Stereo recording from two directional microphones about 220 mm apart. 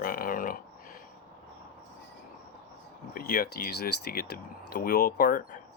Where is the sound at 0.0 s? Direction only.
40° left (ahead or behind).